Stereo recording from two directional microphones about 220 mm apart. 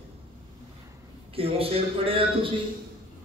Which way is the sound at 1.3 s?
25° right (ahead or behind).